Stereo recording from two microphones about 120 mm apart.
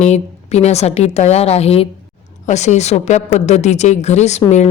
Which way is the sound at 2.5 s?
75° left (ahead or behind).